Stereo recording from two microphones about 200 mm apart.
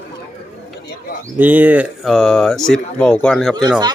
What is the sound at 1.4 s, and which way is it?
Speech, 10° right (ahead or behind).